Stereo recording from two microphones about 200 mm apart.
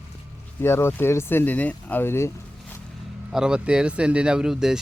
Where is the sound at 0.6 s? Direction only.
10° left (ahead or behind).